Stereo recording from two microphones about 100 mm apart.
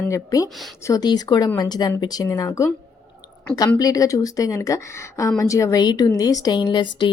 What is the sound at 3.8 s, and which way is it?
Speech, 35° left (ahead or behind).